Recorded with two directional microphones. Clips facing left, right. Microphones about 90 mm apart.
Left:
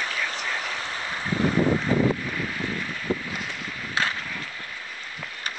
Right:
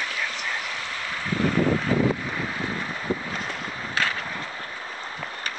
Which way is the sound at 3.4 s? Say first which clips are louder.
Right 2 dB; 30° right (ahead or behind).